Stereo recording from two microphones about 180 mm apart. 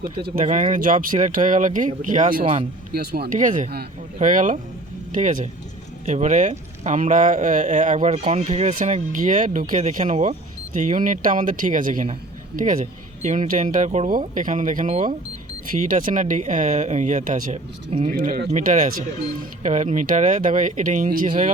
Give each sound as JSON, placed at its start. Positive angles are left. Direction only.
{"t": 0.0, "sound": "speech", "side_deg": -45}
{"t": 2.4, "sound": "speech", "side_deg": -35}
{"t": 2.9, "sound": "speech", "side_deg": -60}
{"t": 3.2, "sound": "speech", "side_deg": -45}